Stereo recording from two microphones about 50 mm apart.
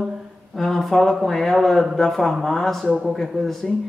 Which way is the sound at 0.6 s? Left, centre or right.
Centre.